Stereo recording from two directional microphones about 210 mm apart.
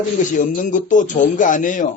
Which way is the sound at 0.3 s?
40° left (ahead or behind).